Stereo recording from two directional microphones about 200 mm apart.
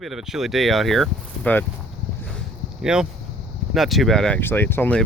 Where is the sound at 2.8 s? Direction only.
5° right (ahead or behind).